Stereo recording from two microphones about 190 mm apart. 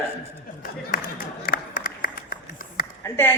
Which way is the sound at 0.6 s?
50° left (ahead or behind).